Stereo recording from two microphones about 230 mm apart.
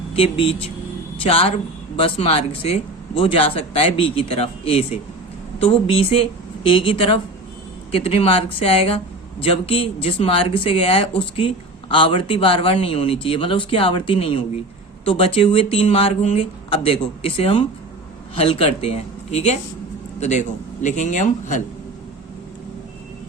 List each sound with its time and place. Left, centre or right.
0.1 s speech: left